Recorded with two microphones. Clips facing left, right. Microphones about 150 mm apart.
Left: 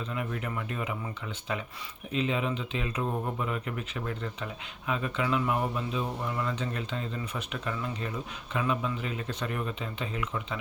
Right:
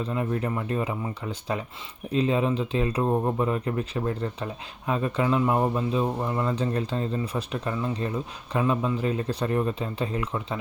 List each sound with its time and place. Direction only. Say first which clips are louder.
0.0 s speech: right 7 dB; 30° right (ahead or behind)